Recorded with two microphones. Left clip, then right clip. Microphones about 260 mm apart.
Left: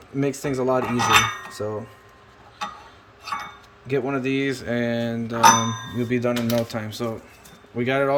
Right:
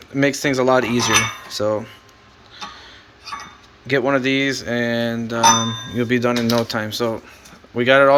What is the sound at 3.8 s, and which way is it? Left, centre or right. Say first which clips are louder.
Speech: right 7 dB; centre.